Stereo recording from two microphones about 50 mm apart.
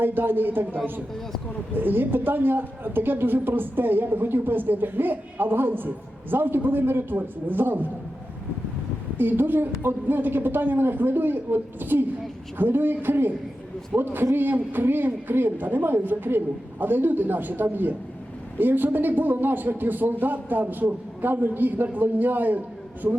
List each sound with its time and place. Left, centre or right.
0.0 s a woman's voice: right
9.1 s a woman's voice: right